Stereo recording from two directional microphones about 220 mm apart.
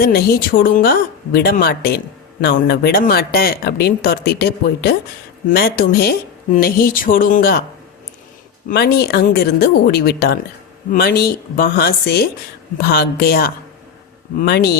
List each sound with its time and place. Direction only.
0.0 s speech: 45° left (ahead or behind)
8.7 s speech: 45° left (ahead or behind)